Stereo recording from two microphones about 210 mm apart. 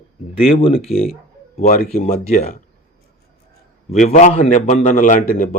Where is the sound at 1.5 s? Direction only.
40° left (ahead or behind).